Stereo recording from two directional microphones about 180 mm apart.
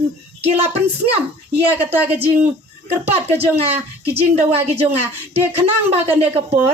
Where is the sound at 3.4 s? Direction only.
35° right (ahead or behind).